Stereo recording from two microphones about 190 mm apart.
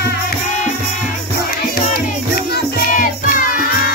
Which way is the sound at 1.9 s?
55° left (ahead or behind).